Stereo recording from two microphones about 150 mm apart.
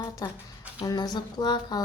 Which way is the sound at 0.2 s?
25° left (ahead or behind).